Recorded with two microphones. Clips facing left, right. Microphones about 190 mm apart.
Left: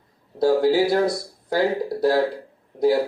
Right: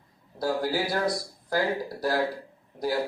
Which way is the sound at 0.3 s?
25° left (ahead or behind).